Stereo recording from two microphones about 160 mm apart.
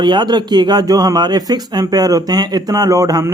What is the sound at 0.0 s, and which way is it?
Speech, 30° right (ahead or behind).